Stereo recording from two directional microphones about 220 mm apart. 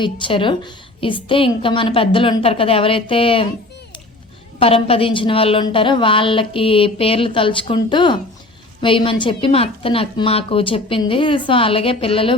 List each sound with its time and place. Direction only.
0.0 s a woman's voice: 20° left (ahead or behind)
4.6 s a woman's voice: 25° left (ahead or behind)